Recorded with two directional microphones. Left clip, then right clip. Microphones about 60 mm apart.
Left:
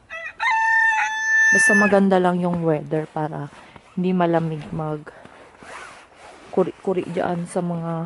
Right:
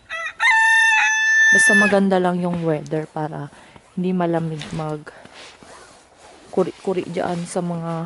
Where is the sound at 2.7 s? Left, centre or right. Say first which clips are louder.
Left 1 dB; centre.